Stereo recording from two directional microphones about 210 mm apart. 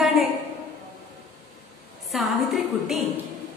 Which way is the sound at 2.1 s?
Centre (ahead or behind).